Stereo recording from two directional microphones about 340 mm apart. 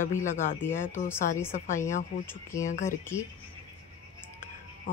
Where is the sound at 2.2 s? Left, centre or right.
Centre.